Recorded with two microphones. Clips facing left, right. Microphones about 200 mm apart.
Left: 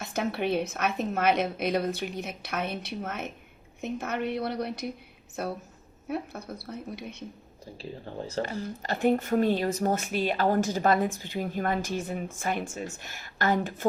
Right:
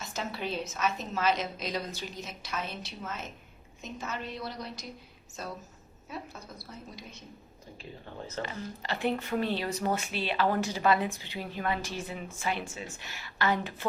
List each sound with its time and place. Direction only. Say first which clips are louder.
0.0 s a woman's voice: left 7 dB; 60° left (ahead or behind)
7.8 s speech: left 6 dB; 35° left (ahead or behind)